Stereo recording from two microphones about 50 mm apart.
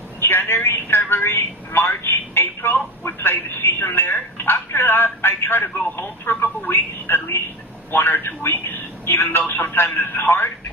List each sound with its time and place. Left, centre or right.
0.2 s a man's voice: left